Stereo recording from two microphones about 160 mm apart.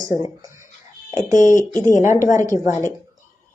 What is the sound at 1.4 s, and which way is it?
Speech, 55° left (ahead or behind).